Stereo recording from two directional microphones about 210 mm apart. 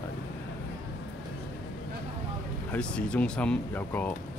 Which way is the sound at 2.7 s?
5° left (ahead or behind).